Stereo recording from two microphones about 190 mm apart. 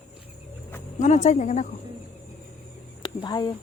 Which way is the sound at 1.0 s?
40° left (ahead or behind).